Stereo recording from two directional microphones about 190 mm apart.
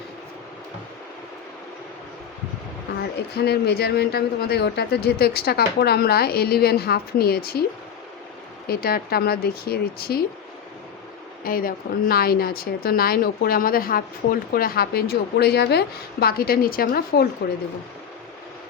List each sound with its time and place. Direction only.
3.3 s speech: 55° left (ahead or behind)
8.6 s a woman's voice: 55° left (ahead or behind)
11.4 s a woman's voice: 50° left (ahead or behind)